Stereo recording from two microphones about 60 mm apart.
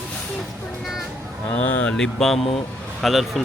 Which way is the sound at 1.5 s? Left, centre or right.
Left.